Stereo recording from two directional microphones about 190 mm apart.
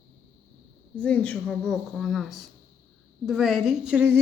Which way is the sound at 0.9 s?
5° left (ahead or behind).